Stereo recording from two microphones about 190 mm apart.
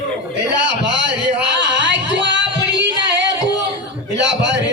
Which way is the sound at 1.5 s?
70° right (ahead or behind).